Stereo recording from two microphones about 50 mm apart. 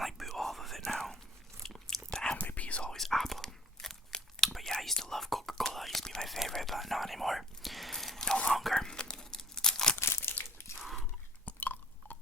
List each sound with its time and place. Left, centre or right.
0.0 s whispering: centre
1.6 s chewing: centre
2.4 s whispering: left
2.9 s whispering: centre
8.7 s dog: centre
10.0 s crumpling: left
10.8 s a sound: centre
11.4 s chewing: left